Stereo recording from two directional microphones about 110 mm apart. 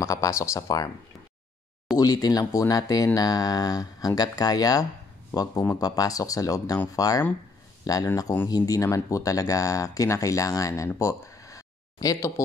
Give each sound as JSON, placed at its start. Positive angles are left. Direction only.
{"t": 0.0, "sound": "speech", "side_deg": 30}
{"t": 2.0, "sound": "speech", "side_deg": 35}
{"t": 10.9, "sound": "a sound", "side_deg": 30}